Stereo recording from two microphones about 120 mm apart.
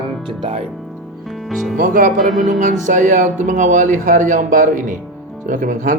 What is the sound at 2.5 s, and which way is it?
Speech, 90° right.